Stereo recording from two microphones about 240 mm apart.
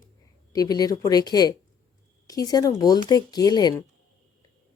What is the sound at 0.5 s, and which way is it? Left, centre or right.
A woman's voice, centre.